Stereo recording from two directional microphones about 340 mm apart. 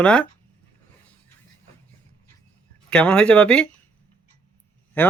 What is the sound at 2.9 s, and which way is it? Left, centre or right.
Speech, centre.